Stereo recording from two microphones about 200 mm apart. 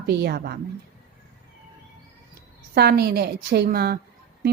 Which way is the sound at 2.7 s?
50° right (ahead or behind).